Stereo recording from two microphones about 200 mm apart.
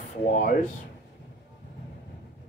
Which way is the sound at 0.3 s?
45° left (ahead or behind).